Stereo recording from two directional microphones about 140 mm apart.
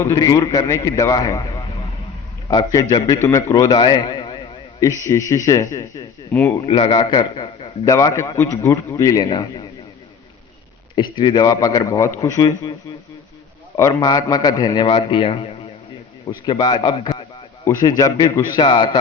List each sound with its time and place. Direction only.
0.0 s a man's voice: 20° left (ahead or behind)
3.9 s a sound: 35° left (ahead or behind)
5.0 s a man's voice: 20° left (ahead or behind)
6.7 s a man's voice: 40° left (ahead or behind)
7.9 s a man's voice: 25° left (ahead or behind)
10.9 s a man's voice: 35° left (ahead or behind)
13.7 s a man's voice: 25° left (ahead or behind)
17.7 s a man's voice: 25° left (ahead or behind)